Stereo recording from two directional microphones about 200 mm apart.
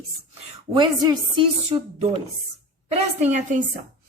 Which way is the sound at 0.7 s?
20° right (ahead or behind).